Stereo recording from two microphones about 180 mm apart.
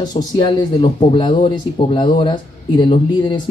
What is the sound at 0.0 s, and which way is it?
Speech, 25° left (ahead or behind).